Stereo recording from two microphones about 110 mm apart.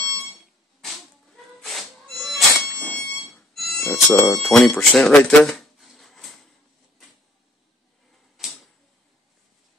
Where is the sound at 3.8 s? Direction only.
25° left (ahead or behind).